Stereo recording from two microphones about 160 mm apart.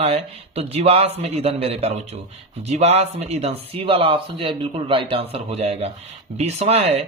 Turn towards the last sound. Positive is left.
turn(degrees=-40)  # may be behind; listen again after turning